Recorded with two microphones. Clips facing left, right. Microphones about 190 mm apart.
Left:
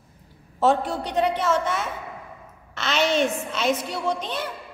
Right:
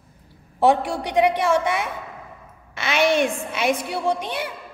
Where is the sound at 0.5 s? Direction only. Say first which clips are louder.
Right 2 dB; 15° right (ahead or behind).